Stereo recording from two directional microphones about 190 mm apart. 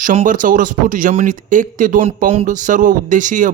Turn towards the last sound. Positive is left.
turn(degrees=-40)  # may be behind; listen again after turning